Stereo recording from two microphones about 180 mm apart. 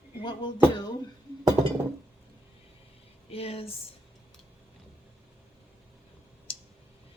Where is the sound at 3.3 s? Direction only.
35° left (ahead or behind).